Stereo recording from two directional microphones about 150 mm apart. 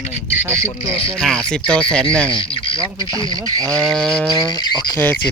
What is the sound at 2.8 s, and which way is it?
Speech, 25° right (ahead or behind).